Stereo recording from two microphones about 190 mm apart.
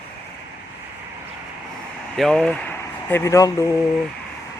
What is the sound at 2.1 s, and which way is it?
Speech, 5° left (ahead or behind).